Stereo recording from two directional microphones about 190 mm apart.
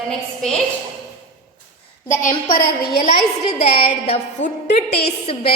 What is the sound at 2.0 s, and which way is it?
Speech, 45° left (ahead or behind).